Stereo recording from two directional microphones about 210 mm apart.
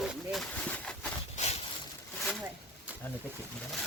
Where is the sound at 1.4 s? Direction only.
35° left (ahead or behind).